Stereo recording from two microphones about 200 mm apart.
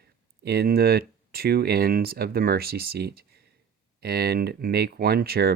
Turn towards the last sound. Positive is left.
turn(degrees=-50)  # may be behind; listen again after turning